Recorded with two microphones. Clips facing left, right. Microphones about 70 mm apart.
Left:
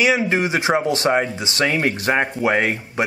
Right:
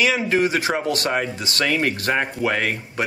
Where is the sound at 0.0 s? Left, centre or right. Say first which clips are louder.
Left 1 dB; left.